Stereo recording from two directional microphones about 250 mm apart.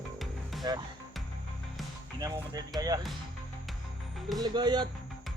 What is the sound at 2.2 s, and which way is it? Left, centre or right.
Music, centre.